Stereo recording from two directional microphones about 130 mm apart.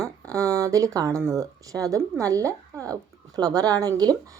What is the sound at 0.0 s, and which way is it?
Speech, 25° right (ahead or behind).